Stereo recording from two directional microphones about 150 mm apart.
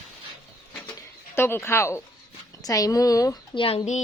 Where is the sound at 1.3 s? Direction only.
15° left (ahead or behind).